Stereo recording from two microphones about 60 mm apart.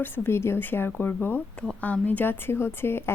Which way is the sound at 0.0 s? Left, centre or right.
Left.